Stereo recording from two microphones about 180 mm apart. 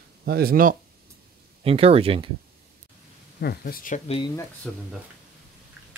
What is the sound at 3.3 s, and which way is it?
Speech, 60° left (ahead or behind).